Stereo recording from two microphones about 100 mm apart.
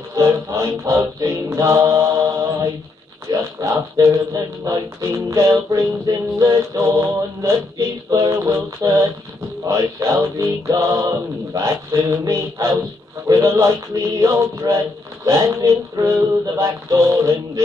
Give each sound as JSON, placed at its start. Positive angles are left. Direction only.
{"t": 0.1, "sound": "music", "side_deg": -30}
{"t": 3.3, "sound": "speech", "side_deg": -30}